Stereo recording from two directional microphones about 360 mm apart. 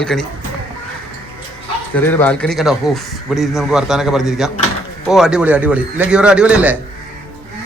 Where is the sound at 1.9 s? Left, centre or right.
Centre.